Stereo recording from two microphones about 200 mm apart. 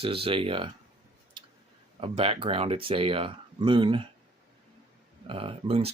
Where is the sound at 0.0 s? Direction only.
25° right (ahead or behind).